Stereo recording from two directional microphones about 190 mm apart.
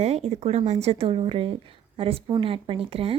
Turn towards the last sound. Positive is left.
turn(degrees=-30)  # may be behind; listen again after turning